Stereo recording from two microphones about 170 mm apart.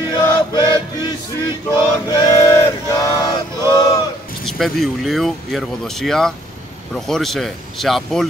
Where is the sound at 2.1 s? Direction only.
20° left (ahead or behind).